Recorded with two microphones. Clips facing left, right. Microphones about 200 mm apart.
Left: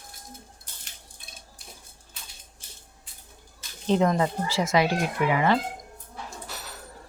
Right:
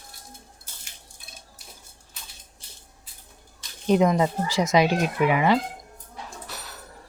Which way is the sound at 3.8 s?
15° right (ahead or behind).